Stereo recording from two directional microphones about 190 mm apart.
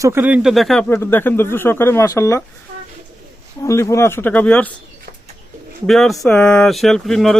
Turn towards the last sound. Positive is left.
turn(degrees=0)  # may be behind; listen again after turning